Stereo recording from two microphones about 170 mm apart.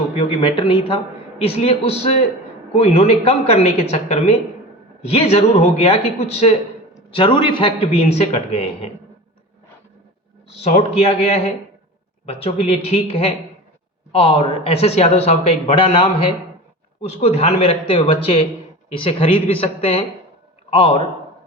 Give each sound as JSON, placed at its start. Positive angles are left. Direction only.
{"t": 0.2, "sound": "speech", "side_deg": 30}
{"t": 10.6, "sound": "a man's voice", "side_deg": 40}